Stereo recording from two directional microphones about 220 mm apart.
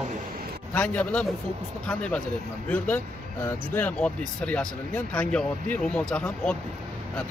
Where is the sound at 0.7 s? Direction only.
5° left (ahead or behind).